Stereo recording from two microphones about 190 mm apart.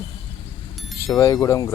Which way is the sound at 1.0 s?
15° left (ahead or behind).